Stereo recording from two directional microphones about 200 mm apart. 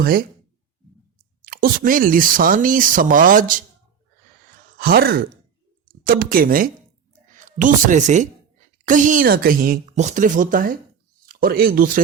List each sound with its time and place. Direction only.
0.0 s speech: 50° right (ahead or behind)
1.5 s speech: 45° right (ahead or behind)
4.8 s speech: 50° right (ahead or behind)